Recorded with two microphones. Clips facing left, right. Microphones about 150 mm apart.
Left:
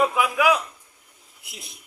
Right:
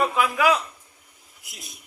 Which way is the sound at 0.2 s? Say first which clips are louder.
Even; 15° left (ahead or behind).